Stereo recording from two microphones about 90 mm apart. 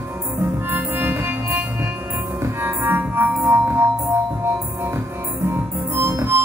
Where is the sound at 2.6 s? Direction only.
25° right (ahead or behind).